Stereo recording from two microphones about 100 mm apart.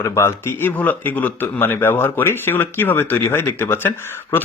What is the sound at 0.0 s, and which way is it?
Speech, 25° left (ahead or behind).